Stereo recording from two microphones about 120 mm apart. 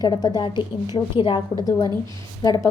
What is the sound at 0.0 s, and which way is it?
A woman's voice, 35° left (ahead or behind).